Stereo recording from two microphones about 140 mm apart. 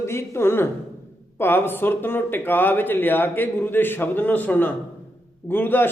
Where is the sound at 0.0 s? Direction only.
20° left (ahead or behind).